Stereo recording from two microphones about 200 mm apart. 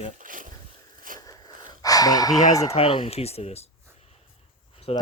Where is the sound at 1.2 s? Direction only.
20° left (ahead or behind).